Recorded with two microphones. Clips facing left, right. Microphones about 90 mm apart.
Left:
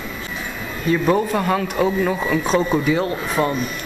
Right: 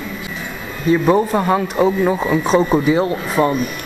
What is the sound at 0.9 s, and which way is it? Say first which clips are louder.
Speech: right 4 dB; 20° right (ahead or behind).